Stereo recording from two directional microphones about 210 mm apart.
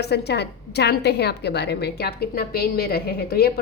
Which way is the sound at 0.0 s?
50° left (ahead or behind).